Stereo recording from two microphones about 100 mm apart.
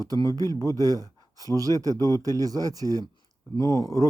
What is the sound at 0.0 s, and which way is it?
Speech, 40° right (ahead or behind).